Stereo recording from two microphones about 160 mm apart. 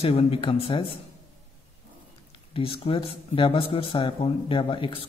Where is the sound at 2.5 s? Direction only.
35° left (ahead or behind).